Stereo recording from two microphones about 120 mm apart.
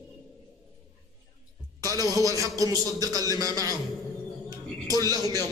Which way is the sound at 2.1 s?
30° right (ahead or behind).